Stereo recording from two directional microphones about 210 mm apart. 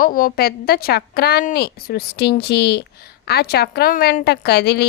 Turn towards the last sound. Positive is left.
turn(degrees=50)  # may be behind; listen again after turning